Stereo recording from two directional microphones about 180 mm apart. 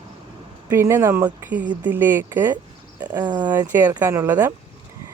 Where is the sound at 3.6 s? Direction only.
10° right (ahead or behind).